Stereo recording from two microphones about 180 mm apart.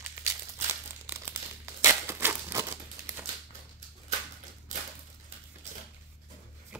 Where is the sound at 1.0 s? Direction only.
15° right (ahead or behind).